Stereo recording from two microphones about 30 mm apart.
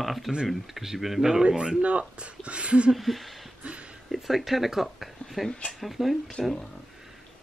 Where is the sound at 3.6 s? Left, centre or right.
Right.